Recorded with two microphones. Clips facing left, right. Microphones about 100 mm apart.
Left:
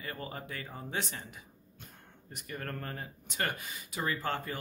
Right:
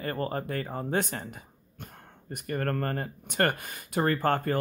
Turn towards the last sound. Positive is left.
turn(degrees=-55)  # may be behind; listen again after turning